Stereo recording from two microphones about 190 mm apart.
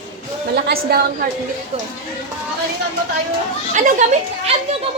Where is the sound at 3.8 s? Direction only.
35° right (ahead or behind).